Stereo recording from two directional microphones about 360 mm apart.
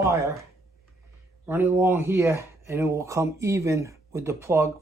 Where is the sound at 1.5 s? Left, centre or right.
Centre.